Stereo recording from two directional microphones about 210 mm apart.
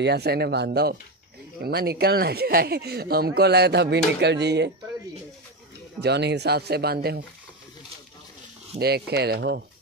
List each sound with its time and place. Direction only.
0.0 s speech: 50° right (ahead or behind)
5.9 s speech: 55° right (ahead or behind)
8.7 s speech: 50° right (ahead or behind)